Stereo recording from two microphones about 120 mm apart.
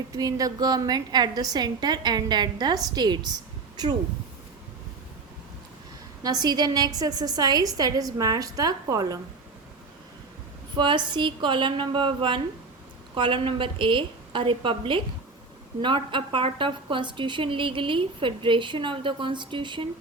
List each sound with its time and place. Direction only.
0.1 s a woman's voice: 30° right (ahead or behind)
6.2 s a woman's voice: 35° right (ahead or behind)
10.8 s a woman's voice: 40° right (ahead or behind)